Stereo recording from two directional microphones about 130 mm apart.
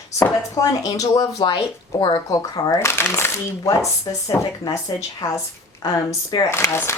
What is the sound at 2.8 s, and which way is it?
Speech, 20° left (ahead or behind).